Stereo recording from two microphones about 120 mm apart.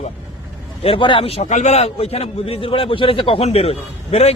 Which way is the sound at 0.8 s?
45° left (ahead or behind).